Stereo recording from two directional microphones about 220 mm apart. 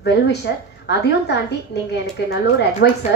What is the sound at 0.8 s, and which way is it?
A woman's voice, 50° left (ahead or behind).